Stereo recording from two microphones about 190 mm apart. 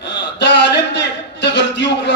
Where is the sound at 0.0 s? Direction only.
65° left (ahead or behind).